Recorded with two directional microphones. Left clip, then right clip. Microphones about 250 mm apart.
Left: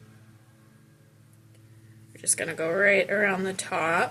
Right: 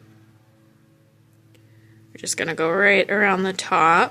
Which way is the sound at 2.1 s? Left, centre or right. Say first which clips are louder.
Right 6 dB; right.